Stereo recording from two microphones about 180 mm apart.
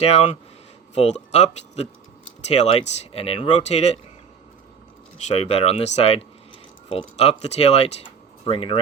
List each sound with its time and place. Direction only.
0.0 s speech: 35° left (ahead or behind)
5.1 s speech: 35° left (ahead or behind)